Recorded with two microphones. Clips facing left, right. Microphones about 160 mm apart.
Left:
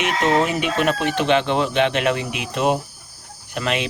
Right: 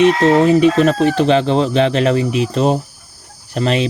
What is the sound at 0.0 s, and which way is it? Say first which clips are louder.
Speech: right 8 dB; 35° right (ahead or behind).